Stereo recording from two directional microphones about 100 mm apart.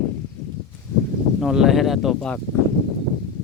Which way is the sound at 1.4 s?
5° right (ahead or behind).